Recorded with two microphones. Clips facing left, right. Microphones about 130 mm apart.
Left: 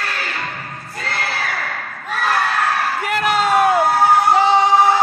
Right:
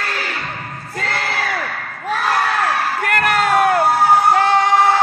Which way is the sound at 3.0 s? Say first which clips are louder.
Right 1 dB; 5° left (ahead or behind).